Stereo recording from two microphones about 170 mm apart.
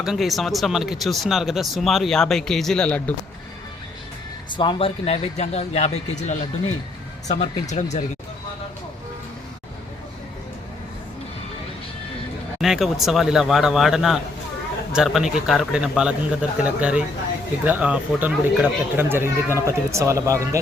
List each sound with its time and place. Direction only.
0.0 s speech: centre (ahead or behind)
4.4 s speech: 25° left (ahead or behind); by 8.0 s 45° left (ahead or behind)
12.6 s speech: centre (ahead or behind); by 20.6 s 20° right (ahead or behind)